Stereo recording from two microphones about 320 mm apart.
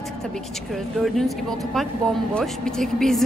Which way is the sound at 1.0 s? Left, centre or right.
Centre.